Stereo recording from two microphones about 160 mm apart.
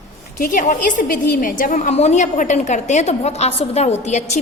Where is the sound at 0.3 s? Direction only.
55° left (ahead or behind).